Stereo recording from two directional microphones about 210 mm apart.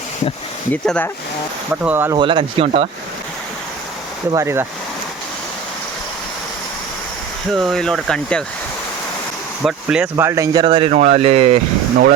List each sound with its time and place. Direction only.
0.7 s speech: 10° left (ahead or behind)
1.7 s speech: 10° right (ahead or behind)
2.1 s speech: 25° right (ahead or behind)
4.3 s speech: 15° right (ahead or behind)
7.5 s speech: centre (ahead or behind)
9.6 s speech: 5° right (ahead or behind); by 11.6 s 30° right (ahead or behind)